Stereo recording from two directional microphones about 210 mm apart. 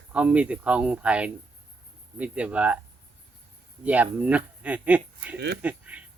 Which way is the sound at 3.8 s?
5° right (ahead or behind).